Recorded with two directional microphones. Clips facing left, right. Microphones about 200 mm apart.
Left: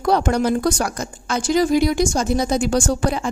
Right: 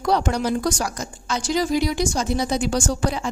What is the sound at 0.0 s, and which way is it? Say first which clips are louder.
A woman's voice: left 3 dB; 55° left (ahead or behind).